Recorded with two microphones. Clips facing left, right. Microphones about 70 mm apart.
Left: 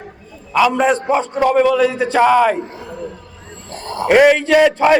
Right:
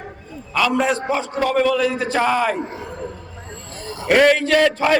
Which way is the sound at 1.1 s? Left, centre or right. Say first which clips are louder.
Left 5 dB; centre.